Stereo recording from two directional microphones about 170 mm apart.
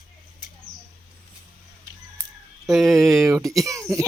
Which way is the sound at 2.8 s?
15° right (ahead or behind).